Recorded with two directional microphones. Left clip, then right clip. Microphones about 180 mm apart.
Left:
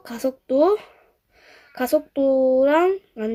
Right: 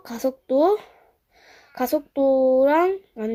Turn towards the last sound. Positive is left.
turn(degrees=-10)  # may be behind; listen again after turning